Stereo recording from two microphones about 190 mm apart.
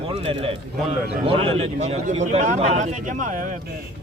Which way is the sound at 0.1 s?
30° right (ahead or behind).